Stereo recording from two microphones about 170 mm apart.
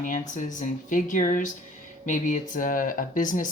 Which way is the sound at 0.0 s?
50° left (ahead or behind).